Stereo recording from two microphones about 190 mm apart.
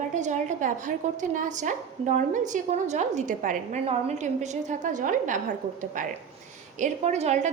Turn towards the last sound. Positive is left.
turn(degrees=-35)  # may be behind; listen again after turning